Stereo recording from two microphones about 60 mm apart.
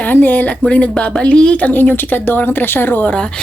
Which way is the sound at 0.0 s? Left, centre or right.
Left.